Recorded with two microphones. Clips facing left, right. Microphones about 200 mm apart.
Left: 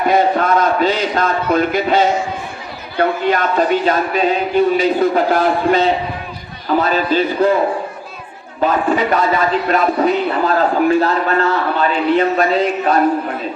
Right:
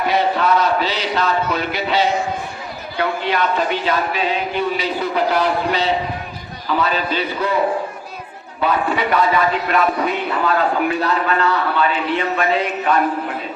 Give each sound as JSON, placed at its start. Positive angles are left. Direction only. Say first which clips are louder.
{"t": 0.0, "sound": "a sound", "louder": "left 4 dB", "side_deg": 45}
{"t": 3.0, "sound": "speech", "louder": "left 4 dB", "side_deg": 45}
{"t": 8.6, "sound": "a man's voice", "louder": "left 4 dB", "side_deg": 40}